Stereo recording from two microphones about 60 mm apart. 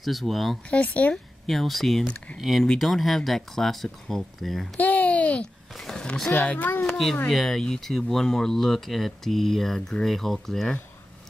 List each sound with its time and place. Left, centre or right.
0.0 s speech: centre
0.7 s speech: left
1.1 s speech: centre
4.7 s a sound: left
5.8 s speech: centre
6.4 s speech: left
6.8 s speech: centre